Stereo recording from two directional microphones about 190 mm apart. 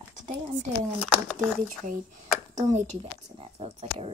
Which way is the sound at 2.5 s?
35° right (ahead or behind).